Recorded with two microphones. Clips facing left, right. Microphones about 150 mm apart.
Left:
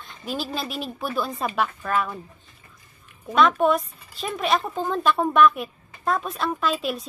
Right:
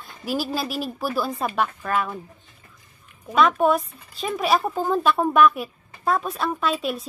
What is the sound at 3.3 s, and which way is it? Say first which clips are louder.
Speech: even; centre (ahead or behind).